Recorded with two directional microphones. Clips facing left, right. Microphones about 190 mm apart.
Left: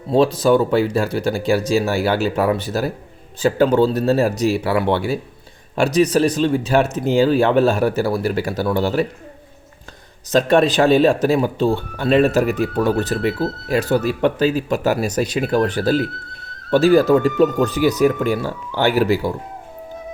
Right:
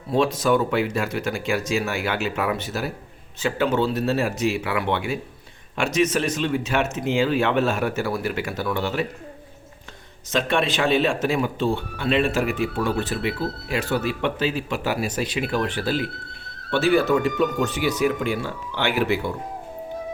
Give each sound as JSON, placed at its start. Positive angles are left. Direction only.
{"t": 0.1, "sound": "speech", "side_deg": 30}
{"t": 10.3, "sound": "speech", "side_deg": 40}